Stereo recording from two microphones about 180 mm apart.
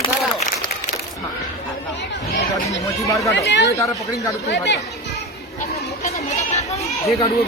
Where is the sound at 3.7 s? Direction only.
20° left (ahead or behind).